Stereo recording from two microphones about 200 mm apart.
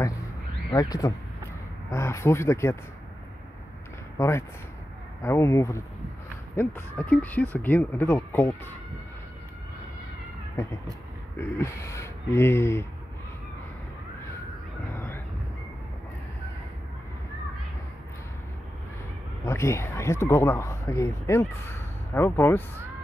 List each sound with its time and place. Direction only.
0.7 s speech: 20° left (ahead or behind)
4.2 s speech: 15° left (ahead or behind)
11.3 s speech: 10° left (ahead or behind)
15.0 s a sound: 10° left (ahead or behind)
19.4 s speech: 15° left (ahead or behind)